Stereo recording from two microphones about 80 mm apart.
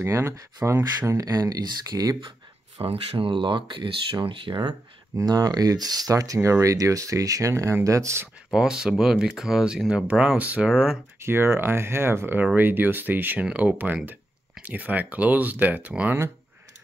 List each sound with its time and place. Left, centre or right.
0.0 s speech: right
2.8 s speech: right
4.6 s speech: right
8.5 s speech: centre
11.1 s speech: right; by 16.2 s centre